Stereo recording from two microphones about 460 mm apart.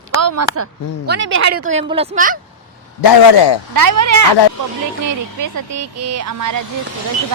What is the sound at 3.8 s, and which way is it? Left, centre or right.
Speech, right.